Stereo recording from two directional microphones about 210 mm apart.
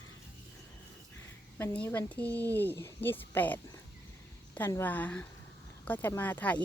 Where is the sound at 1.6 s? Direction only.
10° left (ahead or behind).